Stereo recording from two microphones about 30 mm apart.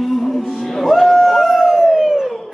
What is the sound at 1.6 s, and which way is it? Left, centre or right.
Howl, right.